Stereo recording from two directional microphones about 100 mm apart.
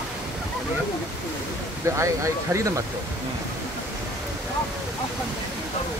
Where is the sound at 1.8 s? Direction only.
30° right (ahead or behind).